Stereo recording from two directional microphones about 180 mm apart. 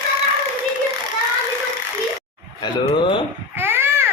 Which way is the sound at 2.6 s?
25° left (ahead or behind).